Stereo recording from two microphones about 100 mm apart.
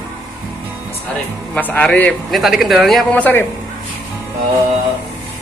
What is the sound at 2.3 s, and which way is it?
Speech, centre (ahead or behind).